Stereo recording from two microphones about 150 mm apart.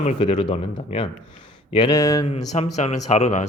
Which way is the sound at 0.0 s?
40° left (ahead or behind).